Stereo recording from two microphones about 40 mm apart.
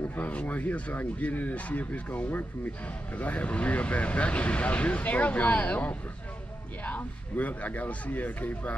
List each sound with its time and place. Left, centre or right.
0.1 s speech: left